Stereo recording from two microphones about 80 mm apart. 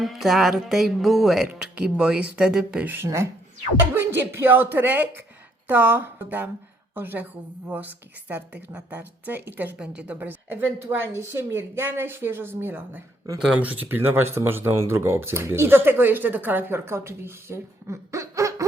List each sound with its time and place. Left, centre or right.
0.0 s speech: centre
1.5 s a woman's voice: centre; by 18.6 s right